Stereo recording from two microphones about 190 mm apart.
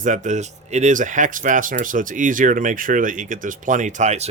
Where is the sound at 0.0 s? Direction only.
40° right (ahead or behind).